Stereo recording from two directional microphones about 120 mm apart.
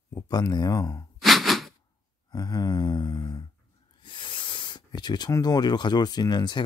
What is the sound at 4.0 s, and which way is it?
Speech, 40° left (ahead or behind).